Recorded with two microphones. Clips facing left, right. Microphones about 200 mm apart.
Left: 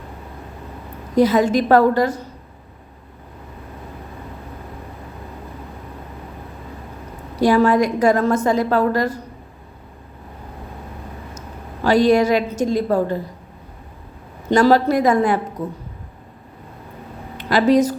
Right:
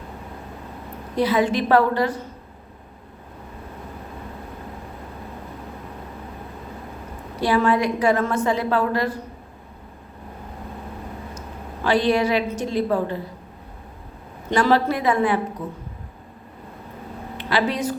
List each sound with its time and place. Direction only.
1.1 s a woman's voice: 45° left (ahead or behind)
7.4 s a woman's voice: 45° left (ahead or behind)
11.3 s a woman's voice: 40° left (ahead or behind)
14.5 s a woman's voice: 40° left (ahead or behind)
17.3 s speech: 45° left (ahead or behind)